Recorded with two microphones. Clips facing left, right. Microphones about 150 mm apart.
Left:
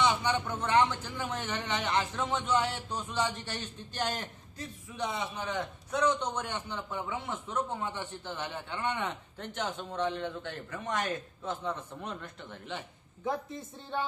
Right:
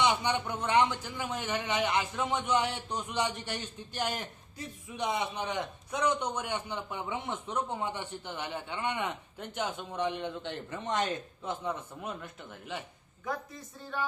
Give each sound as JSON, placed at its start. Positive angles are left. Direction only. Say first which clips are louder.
{"t": 0.0, "sound": "a man's voice", "louder": "even", "side_deg": -15}
{"t": 11.6, "sound": "a man's voice", "louder": "right 1 dB", "side_deg": -10}
{"t": 13.2, "sound": "speech", "louder": "left 3 dB", "side_deg": 25}